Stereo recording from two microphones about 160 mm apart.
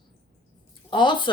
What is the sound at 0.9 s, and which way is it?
Speech, 30° left (ahead or behind).